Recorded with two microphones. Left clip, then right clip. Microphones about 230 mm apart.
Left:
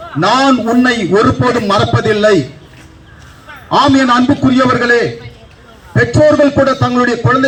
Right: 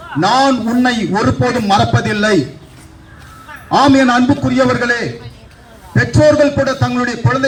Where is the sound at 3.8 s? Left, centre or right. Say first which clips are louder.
Left 1 dB; left.